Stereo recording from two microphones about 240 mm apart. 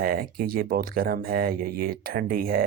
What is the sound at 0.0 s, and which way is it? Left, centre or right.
Speech, right.